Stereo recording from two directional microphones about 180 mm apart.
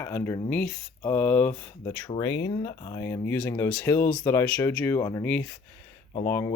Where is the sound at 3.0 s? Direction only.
15° left (ahead or behind).